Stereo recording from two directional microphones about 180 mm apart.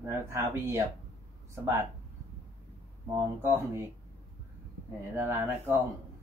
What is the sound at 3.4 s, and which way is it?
Speech, 15° right (ahead or behind).